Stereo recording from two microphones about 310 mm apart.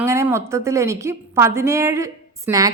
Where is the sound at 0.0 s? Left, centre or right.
Centre.